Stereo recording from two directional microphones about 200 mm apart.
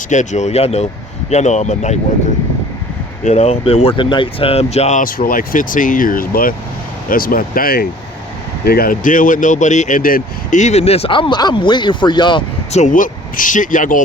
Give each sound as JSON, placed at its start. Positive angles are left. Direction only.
{"t": 0.1, "sound": "speech", "side_deg": 35}
{"t": 3.2, "sound": "speech", "side_deg": 35}
{"t": 12.7, "sound": "speech", "side_deg": 40}